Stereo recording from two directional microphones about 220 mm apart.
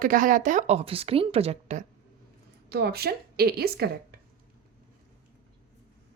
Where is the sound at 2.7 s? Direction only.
45° right (ahead or behind).